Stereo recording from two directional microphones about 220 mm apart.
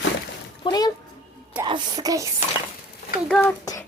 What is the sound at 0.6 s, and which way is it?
Speech, 20° left (ahead or behind).